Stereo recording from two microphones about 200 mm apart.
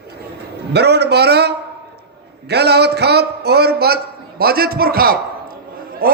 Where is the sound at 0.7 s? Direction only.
55° right (ahead or behind).